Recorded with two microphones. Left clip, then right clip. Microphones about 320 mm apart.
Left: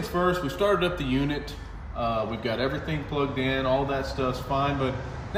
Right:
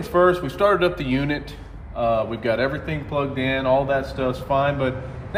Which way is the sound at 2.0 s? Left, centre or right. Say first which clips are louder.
Right 6 dB; centre.